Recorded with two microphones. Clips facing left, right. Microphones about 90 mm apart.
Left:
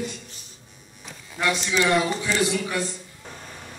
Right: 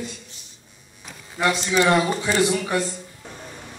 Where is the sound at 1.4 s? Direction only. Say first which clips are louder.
Right 3 dB; 35° right (ahead or behind).